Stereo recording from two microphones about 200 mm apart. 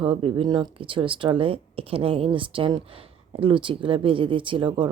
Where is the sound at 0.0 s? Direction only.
25° right (ahead or behind).